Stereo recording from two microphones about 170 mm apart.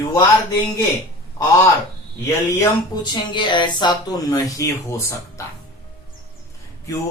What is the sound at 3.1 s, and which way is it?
Speech, 25° left (ahead or behind).